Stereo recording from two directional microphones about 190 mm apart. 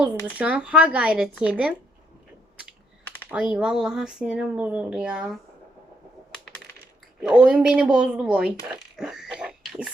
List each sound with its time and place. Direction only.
0.3 s speech: 5° right (ahead or behind)
3.2 s speech: 5° right (ahead or behind)
6.3 s coin: 5° left (ahead or behind)
7.2 s speech: 5° right (ahead or behind)
9.0 s a sound: centre (ahead or behind)